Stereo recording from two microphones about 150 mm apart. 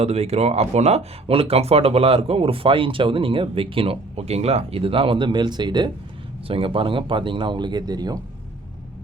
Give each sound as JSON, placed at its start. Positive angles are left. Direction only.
{"t": 0.0, "sound": "speech", "side_deg": -45}